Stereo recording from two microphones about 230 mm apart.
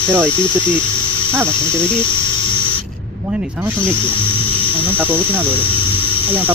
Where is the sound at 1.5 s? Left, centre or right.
Centre.